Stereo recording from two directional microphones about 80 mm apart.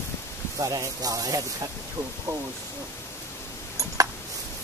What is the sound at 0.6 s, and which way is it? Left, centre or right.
Speech, right.